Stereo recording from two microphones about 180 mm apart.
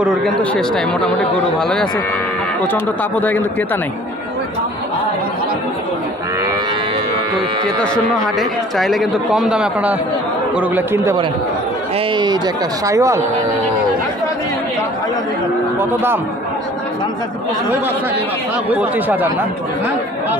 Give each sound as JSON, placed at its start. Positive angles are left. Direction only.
{"t": 0.0, "sound": "a man's voice", "side_deg": 5}
{"t": 7.8, "sound": "a man's voice", "side_deg": 5}
{"t": 12.1, "sound": "a man's voice", "side_deg": -25}
{"t": 15.8, "sound": "speech", "side_deg": -10}
{"t": 18.7, "sound": "speech", "side_deg": -10}